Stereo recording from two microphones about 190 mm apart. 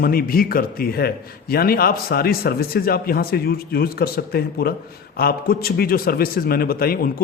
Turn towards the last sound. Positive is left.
turn(degrees=50)  # may be behind; listen again after turning